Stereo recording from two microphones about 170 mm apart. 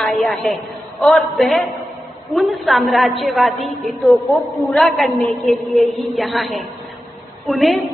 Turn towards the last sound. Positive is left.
turn(degrees=0)  # may be behind; listen again after turning